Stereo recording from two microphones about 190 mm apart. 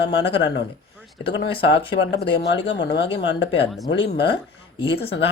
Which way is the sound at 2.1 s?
60° left (ahead or behind).